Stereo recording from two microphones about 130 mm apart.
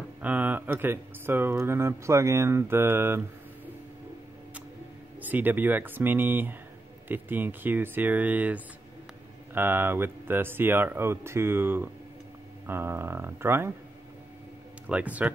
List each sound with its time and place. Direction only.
0.2 s speech: 15° right (ahead or behind)
5.2 s speech: 15° right (ahead or behind)
14.9 s speech: 10° right (ahead or behind)